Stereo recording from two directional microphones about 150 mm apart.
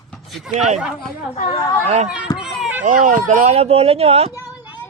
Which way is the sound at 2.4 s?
5° right (ahead or behind).